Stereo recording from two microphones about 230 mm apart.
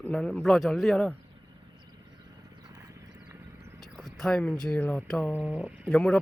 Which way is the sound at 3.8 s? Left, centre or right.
Centre.